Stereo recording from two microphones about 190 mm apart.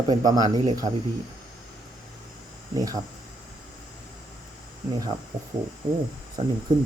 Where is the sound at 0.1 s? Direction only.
20° right (ahead or behind).